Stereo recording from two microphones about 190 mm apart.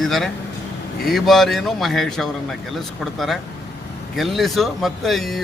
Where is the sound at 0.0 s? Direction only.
Centre (ahead or behind).